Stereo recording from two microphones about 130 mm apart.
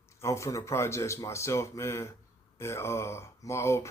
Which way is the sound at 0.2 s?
25° left (ahead or behind).